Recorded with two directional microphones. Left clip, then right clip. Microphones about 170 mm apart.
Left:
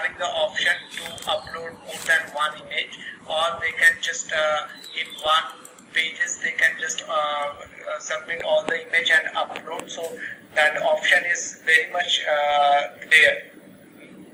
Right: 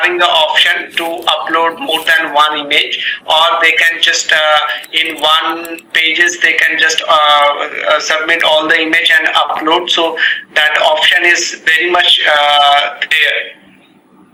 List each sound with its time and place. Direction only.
0.0 s speech: 35° right (ahead or behind)
11.3 s speech: 60° right (ahead or behind)
11.9 s speech: 40° right (ahead or behind)